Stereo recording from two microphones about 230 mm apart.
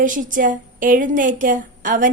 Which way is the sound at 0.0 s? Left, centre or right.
Right.